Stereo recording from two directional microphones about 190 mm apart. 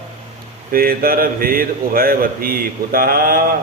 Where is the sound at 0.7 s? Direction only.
50° right (ahead or behind).